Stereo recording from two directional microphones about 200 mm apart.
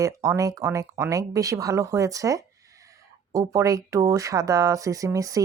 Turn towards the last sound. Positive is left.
turn(degrees=-15)  # may be behind; listen again after turning